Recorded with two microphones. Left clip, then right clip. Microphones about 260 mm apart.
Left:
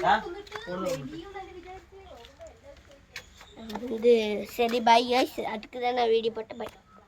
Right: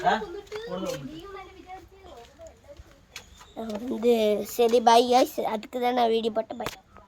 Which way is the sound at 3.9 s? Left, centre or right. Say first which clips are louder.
Even; centre.